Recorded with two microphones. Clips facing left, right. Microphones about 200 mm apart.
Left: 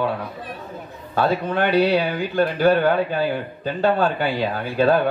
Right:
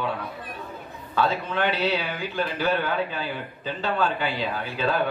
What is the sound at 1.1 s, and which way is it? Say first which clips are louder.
Speech: left 4 dB; 50° left (ahead or behind).